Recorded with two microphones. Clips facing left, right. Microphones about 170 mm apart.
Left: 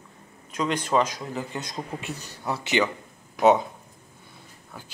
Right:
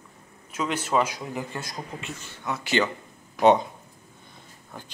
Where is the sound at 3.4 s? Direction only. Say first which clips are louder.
Even; 5° left (ahead or behind).